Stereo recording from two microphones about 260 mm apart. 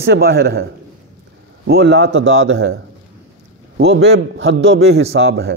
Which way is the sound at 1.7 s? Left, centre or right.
Right.